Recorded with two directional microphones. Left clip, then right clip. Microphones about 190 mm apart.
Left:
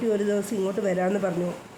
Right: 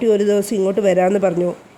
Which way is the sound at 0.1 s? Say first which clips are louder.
Right 10 dB; 35° right (ahead or behind).